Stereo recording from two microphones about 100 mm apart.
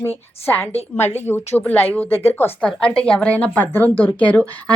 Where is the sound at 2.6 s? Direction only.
10° left (ahead or behind).